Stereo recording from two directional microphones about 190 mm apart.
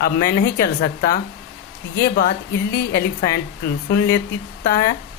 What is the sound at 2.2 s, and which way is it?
Speech, 55° left (ahead or behind).